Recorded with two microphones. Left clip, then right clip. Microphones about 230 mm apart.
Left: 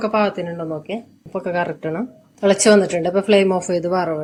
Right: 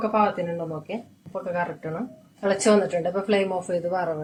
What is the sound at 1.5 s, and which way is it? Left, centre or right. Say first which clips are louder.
Speech: left 6 dB; left.